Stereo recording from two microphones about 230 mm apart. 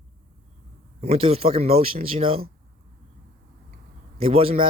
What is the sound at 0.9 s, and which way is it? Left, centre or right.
Speech, right.